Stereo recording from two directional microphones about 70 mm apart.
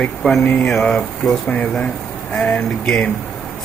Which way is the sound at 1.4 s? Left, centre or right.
Centre.